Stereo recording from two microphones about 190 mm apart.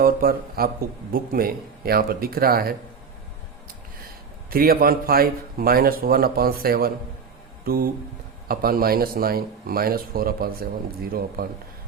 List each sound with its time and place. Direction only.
0.0 s speech: 50° right (ahead or behind)
4.4 s speech: 50° right (ahead or behind)